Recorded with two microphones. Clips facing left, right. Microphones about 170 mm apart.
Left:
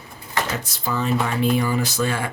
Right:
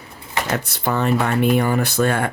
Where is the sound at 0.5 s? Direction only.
60° right (ahead or behind).